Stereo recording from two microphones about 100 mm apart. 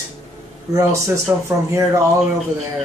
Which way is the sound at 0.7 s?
30° right (ahead or behind).